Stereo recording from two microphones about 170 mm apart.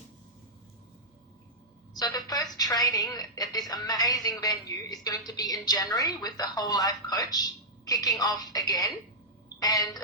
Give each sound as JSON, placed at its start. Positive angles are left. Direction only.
{"t": 1.9, "sound": "a woman's voice", "side_deg": 20}